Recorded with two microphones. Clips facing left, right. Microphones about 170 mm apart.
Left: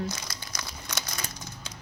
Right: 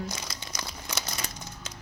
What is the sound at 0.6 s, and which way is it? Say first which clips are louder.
Crumpling: right 2 dB; 35° right (ahead or behind).